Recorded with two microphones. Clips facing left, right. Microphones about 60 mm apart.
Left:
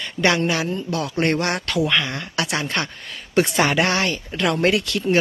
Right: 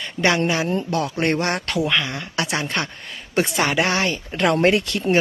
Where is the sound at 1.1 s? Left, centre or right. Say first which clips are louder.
Left 2 dB; centre.